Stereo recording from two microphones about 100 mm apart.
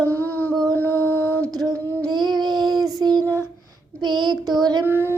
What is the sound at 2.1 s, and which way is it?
Child singing, 45° right (ahead or behind).